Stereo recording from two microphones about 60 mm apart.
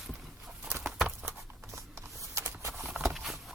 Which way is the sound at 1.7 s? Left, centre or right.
Right.